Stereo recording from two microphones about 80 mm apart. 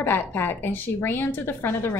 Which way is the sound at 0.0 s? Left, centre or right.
Left.